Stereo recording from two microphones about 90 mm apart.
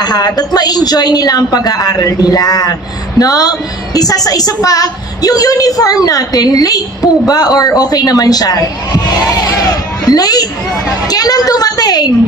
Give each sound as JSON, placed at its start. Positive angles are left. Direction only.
{"t": 0.0, "sound": "a woman's voice", "side_deg": 50}